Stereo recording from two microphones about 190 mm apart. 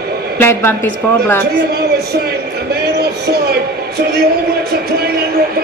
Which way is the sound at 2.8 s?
60° right (ahead or behind).